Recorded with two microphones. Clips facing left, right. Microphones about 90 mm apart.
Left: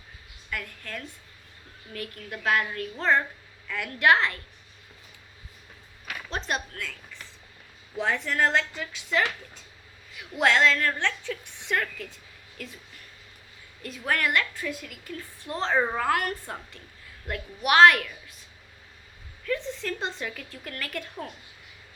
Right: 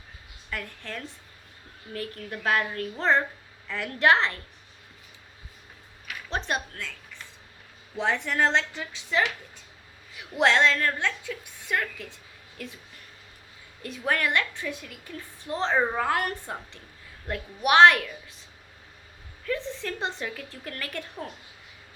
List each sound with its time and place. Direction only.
0.5 s a woman's voice: 30° right (ahead or behind)
6.5 s speech: 25° right (ahead or behind)
7.9 s speech: 20° right (ahead or behind)
10.3 s speech: 25° right (ahead or behind)
11.0 s a woman's voice: 10° right (ahead or behind)
13.8 s speech: 25° right (ahead or behind)
19.5 s speech: 25° right (ahead or behind)